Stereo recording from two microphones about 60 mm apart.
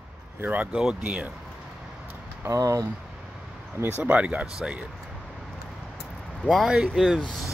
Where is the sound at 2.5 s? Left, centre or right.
Right.